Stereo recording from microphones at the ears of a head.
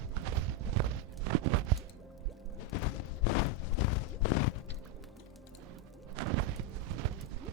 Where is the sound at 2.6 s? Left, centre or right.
Left.